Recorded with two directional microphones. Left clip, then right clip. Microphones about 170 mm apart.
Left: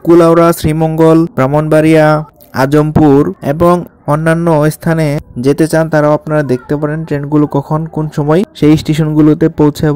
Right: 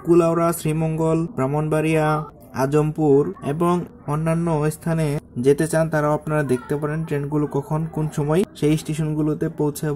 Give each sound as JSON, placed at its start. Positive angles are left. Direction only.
{"t": 0.2, "sound": "speech", "side_deg": 35}